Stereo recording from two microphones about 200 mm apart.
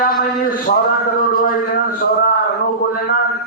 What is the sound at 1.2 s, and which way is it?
A man's voice, 45° left (ahead or behind).